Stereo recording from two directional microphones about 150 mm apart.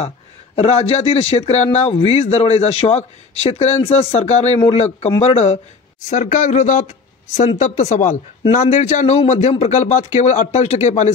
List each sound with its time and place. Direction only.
0.6 s speech: 40° left (ahead or behind)